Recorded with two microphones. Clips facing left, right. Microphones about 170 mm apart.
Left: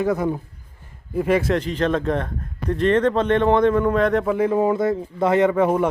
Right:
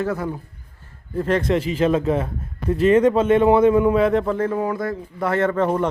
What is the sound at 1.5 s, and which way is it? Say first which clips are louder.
A man's voice: right 2 dB; 5° right (ahead or behind).